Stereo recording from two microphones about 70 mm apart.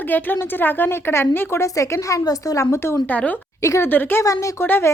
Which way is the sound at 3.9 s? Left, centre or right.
Left.